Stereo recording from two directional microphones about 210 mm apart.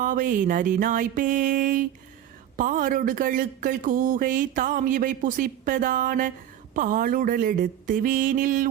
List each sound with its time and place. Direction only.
0.0 s speech: 40° right (ahead or behind)